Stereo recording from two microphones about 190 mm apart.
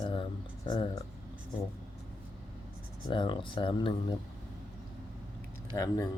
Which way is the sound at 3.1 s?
25° left (ahead or behind).